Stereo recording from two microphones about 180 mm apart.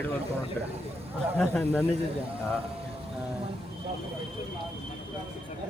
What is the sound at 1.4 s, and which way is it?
Speech, 5° left (ahead or behind).